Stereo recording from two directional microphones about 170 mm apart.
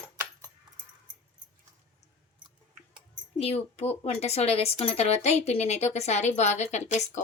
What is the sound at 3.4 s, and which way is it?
A woman's voice, 35° left (ahead or behind).